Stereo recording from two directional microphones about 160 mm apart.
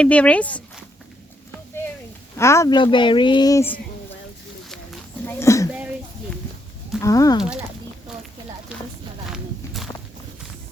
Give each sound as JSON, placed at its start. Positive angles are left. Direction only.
{"t": 0.0, "sound": "speech", "side_deg": 10}
{"t": 2.3, "sound": "speech", "side_deg": 20}
{"t": 5.2, "sound": "a sound", "side_deg": 15}
{"t": 7.0, "sound": "speech", "side_deg": 20}
{"t": 8.7, "sound": "a sound", "side_deg": -10}
{"t": 9.3, "sound": "walk", "side_deg": 0}